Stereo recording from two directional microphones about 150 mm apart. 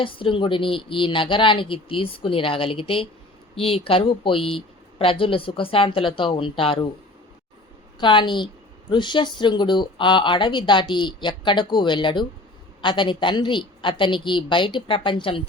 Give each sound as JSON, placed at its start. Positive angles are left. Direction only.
{"t": 0.0, "sound": "speech", "side_deg": 35}
{"t": 7.9, "sound": "speech", "side_deg": 30}